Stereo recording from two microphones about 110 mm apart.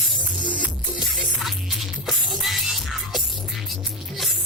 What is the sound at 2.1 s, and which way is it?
Music, centre (ahead or behind).